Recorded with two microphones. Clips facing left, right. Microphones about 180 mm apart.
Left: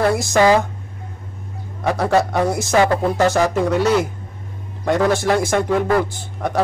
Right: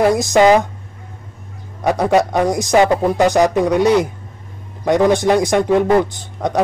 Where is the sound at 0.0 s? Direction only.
20° right (ahead or behind).